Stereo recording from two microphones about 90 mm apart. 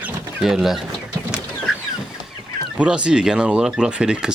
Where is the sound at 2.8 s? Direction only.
10° right (ahead or behind).